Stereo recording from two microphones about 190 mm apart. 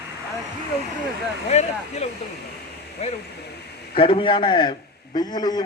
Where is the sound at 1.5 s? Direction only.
35° left (ahead or behind).